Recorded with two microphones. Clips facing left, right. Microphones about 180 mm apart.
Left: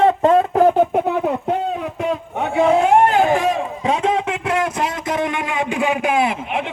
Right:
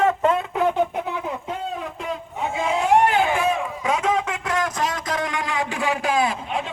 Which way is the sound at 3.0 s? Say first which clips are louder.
Left 4 dB; 40° left (ahead or behind).